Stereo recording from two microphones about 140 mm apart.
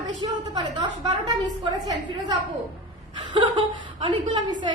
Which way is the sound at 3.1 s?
35° right (ahead or behind).